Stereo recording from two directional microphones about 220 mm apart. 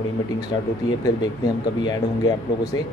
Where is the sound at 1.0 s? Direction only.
20° left (ahead or behind).